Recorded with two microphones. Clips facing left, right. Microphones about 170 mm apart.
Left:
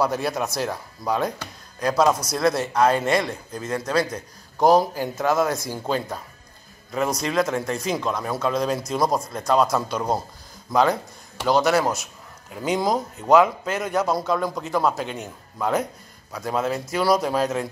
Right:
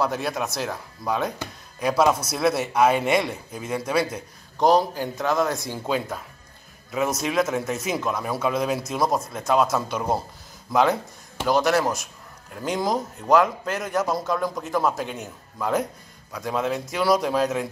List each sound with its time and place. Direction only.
0.0 s speech: centre (ahead or behind)
4.6 s speech: 5° left (ahead or behind)